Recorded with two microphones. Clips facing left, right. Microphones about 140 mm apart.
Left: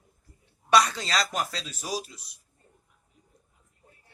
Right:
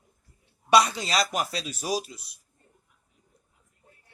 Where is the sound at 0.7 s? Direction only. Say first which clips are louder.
Right 2 dB; 15° right (ahead or behind).